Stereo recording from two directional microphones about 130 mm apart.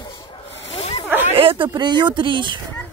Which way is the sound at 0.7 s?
45° left (ahead or behind).